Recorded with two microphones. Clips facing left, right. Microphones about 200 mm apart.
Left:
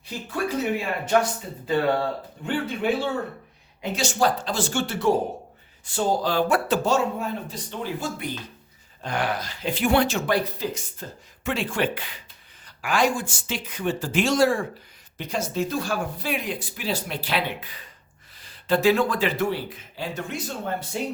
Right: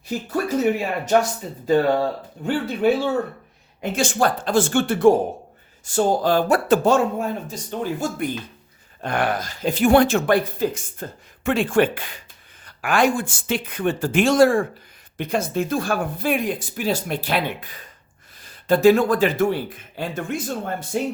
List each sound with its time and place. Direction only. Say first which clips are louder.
0.3 s speech: right 5 dB; 40° right (ahead or behind)
3.8 s speech: right 3 dB; 50° right (ahead or behind)